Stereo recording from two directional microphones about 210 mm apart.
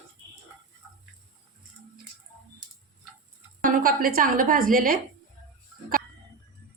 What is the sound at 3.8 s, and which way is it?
A woman's voice, 45° right (ahead or behind).